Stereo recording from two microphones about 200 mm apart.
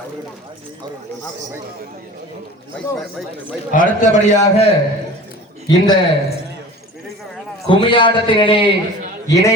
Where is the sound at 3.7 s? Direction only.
40° left (ahead or behind).